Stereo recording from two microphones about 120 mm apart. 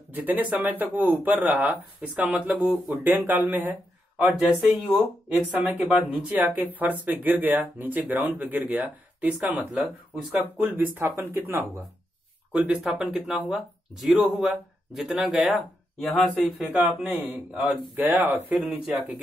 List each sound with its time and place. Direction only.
0.1 s speech: 15° right (ahead or behind)
2.6 s speech: centre (ahead or behind)
3.0 s speech: 15° right (ahead or behind)
12.5 s speech: 10° right (ahead or behind)
16.8 s speech: 15° right (ahead or behind)
17.6 s speech: centre (ahead or behind)
17.9 s speech: 15° right (ahead or behind)